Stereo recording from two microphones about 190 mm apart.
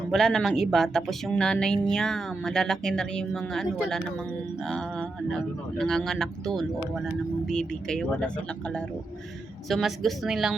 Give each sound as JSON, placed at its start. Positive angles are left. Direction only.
{"t": 0.1, "sound": "speech", "side_deg": 0}